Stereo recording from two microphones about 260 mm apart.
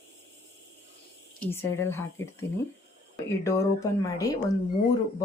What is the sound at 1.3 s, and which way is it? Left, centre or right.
Speech, centre.